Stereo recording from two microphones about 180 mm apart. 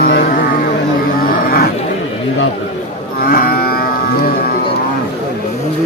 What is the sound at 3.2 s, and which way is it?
Livestock, 55° left (ahead or behind).